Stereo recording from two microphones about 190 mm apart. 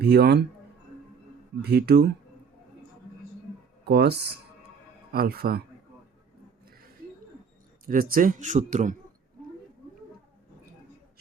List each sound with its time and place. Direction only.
0.0 s speech: 55° right (ahead or behind)
1.6 s speech: 60° right (ahead or behind)
3.8 s speech: 55° right (ahead or behind)
7.9 s speech: 50° right (ahead or behind)